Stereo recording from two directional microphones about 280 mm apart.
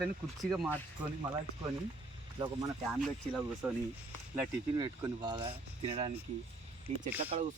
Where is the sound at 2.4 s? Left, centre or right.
Centre.